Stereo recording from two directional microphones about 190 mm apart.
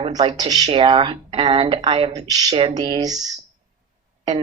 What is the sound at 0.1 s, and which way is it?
Speech, 20° right (ahead or behind).